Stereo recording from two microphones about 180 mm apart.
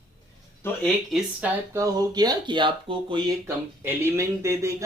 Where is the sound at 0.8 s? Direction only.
Centre (ahead or behind).